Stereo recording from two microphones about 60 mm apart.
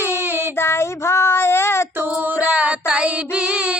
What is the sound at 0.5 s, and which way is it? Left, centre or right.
Child singing, left.